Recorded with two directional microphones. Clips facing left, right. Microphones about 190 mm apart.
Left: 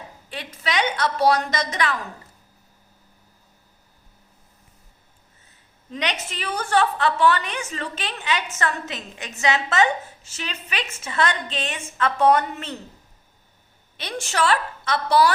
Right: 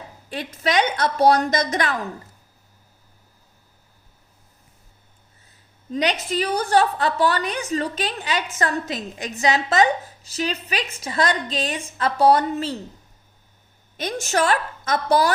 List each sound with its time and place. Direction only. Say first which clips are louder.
0.3 s a woman's voice: right 5 dB; 45° right (ahead or behind)
5.9 s a woman's voice: right 6 dB; 35° right (ahead or behind)
13.9 s a woman's voice: right 5 dB; 45° right (ahead or behind)